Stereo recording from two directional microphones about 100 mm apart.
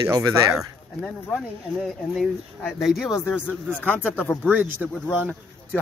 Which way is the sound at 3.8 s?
20° left (ahead or behind).